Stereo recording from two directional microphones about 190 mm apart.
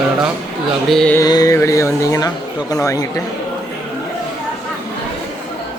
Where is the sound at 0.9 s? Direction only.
5° left (ahead or behind).